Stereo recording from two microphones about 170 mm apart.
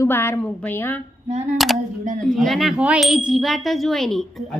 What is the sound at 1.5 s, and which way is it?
Wind chime, centre (ahead or behind).